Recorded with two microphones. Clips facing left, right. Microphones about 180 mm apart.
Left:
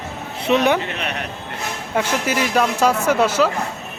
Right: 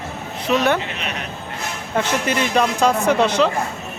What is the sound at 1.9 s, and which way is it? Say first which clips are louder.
Speech: even; 10° left (ahead or behind).